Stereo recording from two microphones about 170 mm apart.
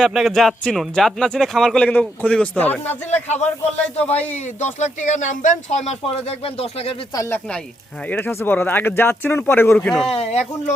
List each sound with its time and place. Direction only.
0.0 s speech: centre (ahead or behind)
3.2 s speech: 40° left (ahead or behind)
4.0 s speech: 10° left (ahead or behind)
4.3 s speech: 45° left (ahead or behind)
7.1 s speech: 15° left (ahead or behind)
10.2 s speech: 40° left (ahead or behind)